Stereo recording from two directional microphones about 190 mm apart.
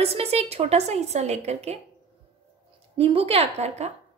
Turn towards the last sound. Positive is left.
turn(degrees=-35)  # may be behind; listen again after turning